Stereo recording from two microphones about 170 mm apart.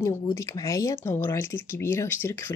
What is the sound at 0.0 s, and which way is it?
Speech, 20° left (ahead or behind).